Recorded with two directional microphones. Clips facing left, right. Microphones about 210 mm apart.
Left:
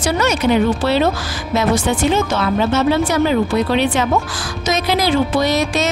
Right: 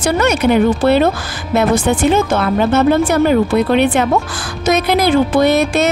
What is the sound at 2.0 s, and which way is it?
Music, 55° right (ahead or behind).